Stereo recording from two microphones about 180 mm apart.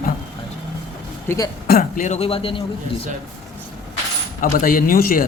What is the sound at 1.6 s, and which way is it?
A man's voice, 55° left (ahead or behind).